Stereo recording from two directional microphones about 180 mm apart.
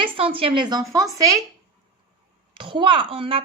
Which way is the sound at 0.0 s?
30° right (ahead or behind).